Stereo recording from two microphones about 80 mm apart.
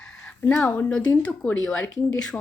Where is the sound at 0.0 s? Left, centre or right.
Centre.